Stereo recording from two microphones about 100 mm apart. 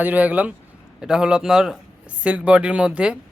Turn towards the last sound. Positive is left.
turn(degrees=-10)  # may be behind; listen again after turning